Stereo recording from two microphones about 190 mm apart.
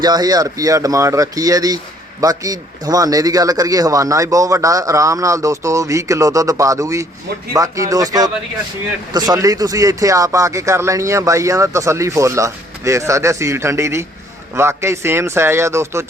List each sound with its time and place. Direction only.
0.0 s speech: 20° right (ahead or behind)